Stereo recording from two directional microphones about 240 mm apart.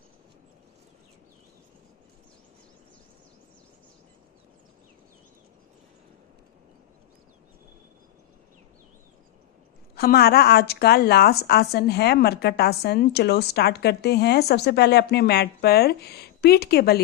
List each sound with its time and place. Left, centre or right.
9.9 s speech: left